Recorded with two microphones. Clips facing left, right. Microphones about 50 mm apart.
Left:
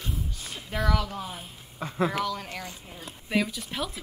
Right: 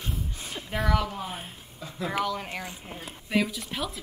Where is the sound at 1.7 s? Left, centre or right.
Left.